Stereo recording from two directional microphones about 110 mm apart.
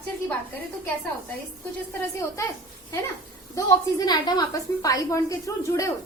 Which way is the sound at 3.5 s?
35° left (ahead or behind).